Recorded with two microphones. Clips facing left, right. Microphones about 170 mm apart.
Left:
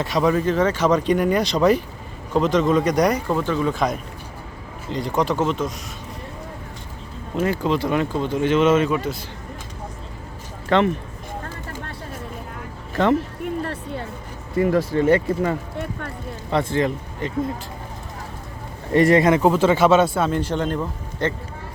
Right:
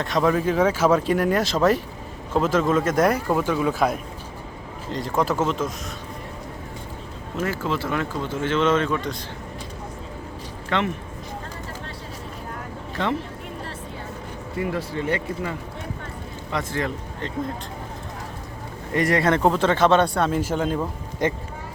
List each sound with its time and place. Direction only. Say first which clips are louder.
0.0 s speech: left 1 dB; centre (ahead or behind)
7.3 s speech: left 5 dB; 20° left (ahead or behind)
10.7 s speech: left 6 dB; 35° left (ahead or behind)
13.0 s speech: left 7 dB; 45° left (ahead or behind)
14.6 s speech: left 8 dB; 45° left (ahead or behind)
16.5 s speech: left 6 dB; 30° left (ahead or behind)
18.9 s speech: left 6 dB; 25° left (ahead or behind)
19.2 s speech: left 3 dB; 5° left (ahead or behind); by 21.3 s 10° right (ahead or behind)